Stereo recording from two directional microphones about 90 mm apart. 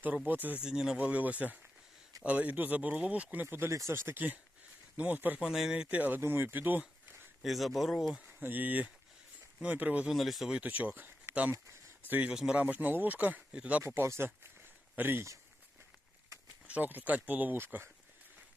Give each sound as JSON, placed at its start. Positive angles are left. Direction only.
{"t": 0.3, "sound": "speech", "side_deg": -20}
{"t": 0.6, "sound": "speech", "side_deg": -5}
{"t": 5.4, "sound": "speech", "side_deg": -5}
{"t": 7.4, "sound": "speech", "side_deg": 0}
{"t": 8.3, "sound": "speech", "side_deg": -20}
{"t": 10.1, "sound": "speech", "side_deg": 0}
{"t": 10.6, "sound": "speech", "side_deg": -20}
{"t": 12.3, "sound": "speech", "side_deg": -10}
{"t": 13.8, "sound": "speech", "side_deg": -30}
{"t": 16.6, "sound": "speech", "side_deg": -20}